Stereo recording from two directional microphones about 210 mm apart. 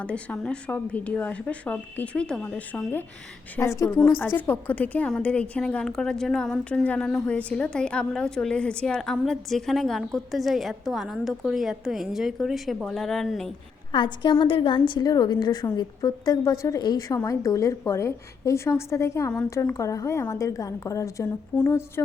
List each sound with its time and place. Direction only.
0.0 s a woman's voice: 5° left (ahead or behind)
13.9 s a woman's voice: 20° left (ahead or behind)